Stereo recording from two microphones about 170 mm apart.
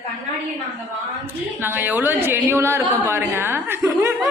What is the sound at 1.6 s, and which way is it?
A woman's voice, 10° right (ahead or behind).